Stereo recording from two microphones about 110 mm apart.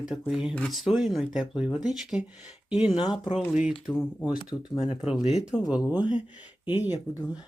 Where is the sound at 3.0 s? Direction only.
45° left (ahead or behind).